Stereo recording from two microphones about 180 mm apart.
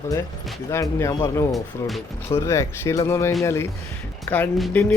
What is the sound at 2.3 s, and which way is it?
Speech, 15° left (ahead or behind).